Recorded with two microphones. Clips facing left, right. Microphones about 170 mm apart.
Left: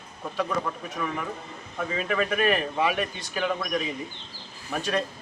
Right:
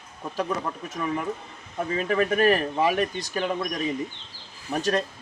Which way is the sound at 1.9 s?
40° right (ahead or behind).